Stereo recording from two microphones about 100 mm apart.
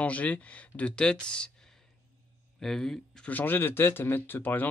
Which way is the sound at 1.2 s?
10° left (ahead or behind).